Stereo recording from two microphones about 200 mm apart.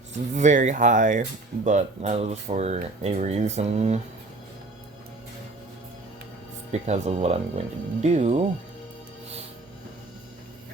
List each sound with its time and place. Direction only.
0.1 s speech: 35° right (ahead or behind)
6.7 s speech: 35° right (ahead or behind)